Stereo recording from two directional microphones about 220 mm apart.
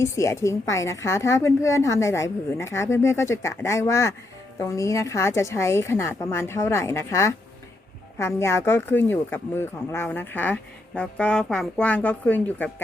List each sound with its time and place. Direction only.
0.0 s speech: 15° left (ahead or behind)